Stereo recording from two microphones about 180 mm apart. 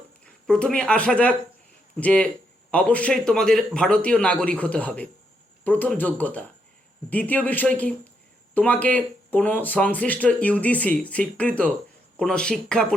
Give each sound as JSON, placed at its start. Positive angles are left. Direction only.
{"t": 0.4, "sound": "speech", "side_deg": 5}